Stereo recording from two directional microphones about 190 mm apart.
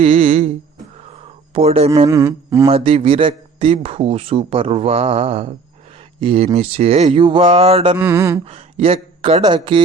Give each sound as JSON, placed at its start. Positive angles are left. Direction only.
{"t": 0.0, "sound": "a man's voice", "side_deg": -30}
{"t": 1.5, "sound": "speech", "side_deg": -30}
{"t": 2.0, "sound": "speech", "side_deg": -15}
{"t": 2.6, "sound": "a man's voice", "side_deg": -30}
{"t": 7.9, "sound": "speech", "side_deg": -15}
{"t": 8.4, "sound": "a man's voice", "side_deg": -30}